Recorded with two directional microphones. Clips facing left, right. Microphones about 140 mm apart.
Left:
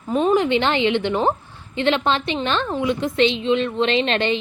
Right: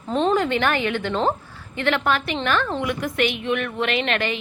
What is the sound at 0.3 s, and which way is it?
A woman's voice, 20° left (ahead or behind).